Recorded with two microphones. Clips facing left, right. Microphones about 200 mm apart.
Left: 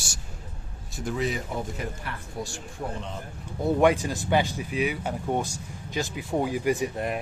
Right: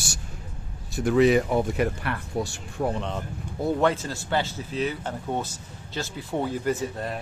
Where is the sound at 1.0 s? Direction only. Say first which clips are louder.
Right 10 dB; 70° right (ahead or behind).